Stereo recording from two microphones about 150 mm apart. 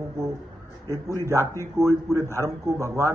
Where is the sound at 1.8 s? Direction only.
20° right (ahead or behind).